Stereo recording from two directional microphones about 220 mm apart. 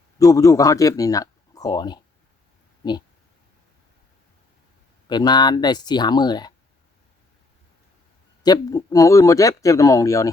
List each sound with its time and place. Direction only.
0.2 s a man's voice: 15° left (ahead or behind)
5.0 s speech: 20° left (ahead or behind)
8.4 s speech: 15° left (ahead or behind)